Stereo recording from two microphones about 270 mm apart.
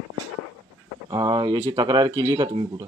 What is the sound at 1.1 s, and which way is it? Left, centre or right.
Speech, centre.